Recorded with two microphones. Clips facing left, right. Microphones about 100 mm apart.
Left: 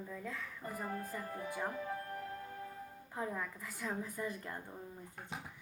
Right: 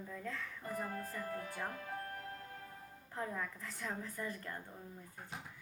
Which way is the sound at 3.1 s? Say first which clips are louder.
Left 1 dB; 10° left (ahead or behind).